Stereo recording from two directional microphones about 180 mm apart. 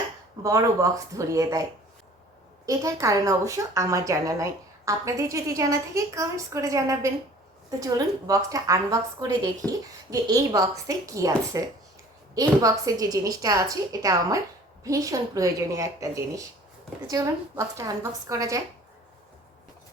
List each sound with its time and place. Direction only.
0.4 s a woman's voice: 20° right (ahead or behind)
2.6 s a woman's voice: 15° right (ahead or behind)